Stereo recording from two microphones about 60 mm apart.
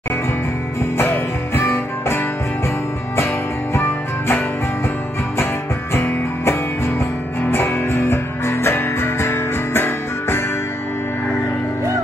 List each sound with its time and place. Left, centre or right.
0.9 s music: left
5.9 s music: left